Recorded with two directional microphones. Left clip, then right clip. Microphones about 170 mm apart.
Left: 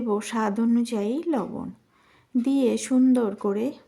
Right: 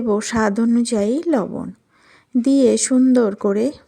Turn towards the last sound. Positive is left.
turn(degrees=-30)  # may be behind; listen again after turning